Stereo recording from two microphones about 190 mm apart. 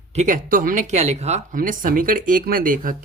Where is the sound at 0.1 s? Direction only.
40° right (ahead or behind).